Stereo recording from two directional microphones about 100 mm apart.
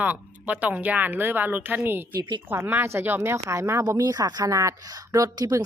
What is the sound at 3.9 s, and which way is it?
Speech, 40° right (ahead or behind).